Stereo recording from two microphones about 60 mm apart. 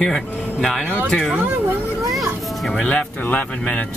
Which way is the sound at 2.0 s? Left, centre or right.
Centre.